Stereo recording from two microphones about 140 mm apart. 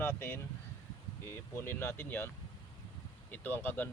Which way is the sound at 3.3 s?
15° left (ahead or behind).